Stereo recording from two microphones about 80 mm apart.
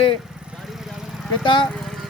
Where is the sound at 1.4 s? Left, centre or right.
Left.